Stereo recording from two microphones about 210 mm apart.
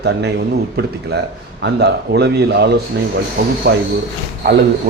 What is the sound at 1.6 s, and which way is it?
Speech, 55° right (ahead or behind).